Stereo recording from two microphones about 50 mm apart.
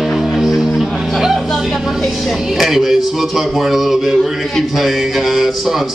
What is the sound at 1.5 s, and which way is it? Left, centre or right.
Speech, centre.